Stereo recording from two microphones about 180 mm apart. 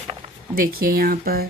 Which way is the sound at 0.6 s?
55° right (ahead or behind).